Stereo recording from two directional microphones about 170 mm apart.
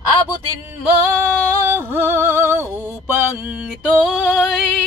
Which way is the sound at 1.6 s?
15° right (ahead or behind).